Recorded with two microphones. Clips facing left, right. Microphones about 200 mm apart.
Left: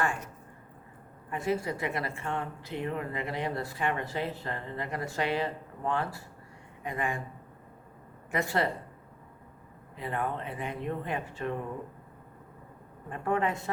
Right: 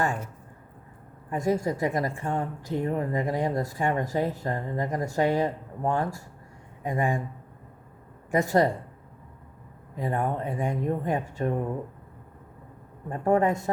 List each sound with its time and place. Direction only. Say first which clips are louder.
1.3 s a woman's voice: right 5 dB; 40° right (ahead or behind)
8.3 s a woman's voice: right 7 dB; 45° right (ahead or behind)
9.9 s a woman's voice: right 5 dB; 45° right (ahead or behind)
13.1 s a woman's voice: right 7 dB; 40° right (ahead or behind)